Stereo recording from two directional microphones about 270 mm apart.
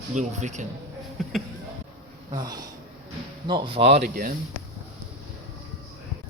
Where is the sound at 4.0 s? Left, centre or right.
Right.